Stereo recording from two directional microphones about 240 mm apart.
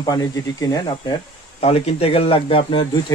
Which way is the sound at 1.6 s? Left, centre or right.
Left.